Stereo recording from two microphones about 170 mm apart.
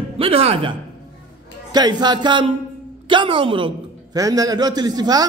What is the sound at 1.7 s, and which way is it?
A man's voice, 25° right (ahead or behind).